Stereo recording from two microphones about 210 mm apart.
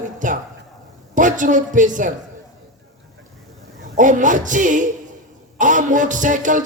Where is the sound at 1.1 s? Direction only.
35° right (ahead or behind).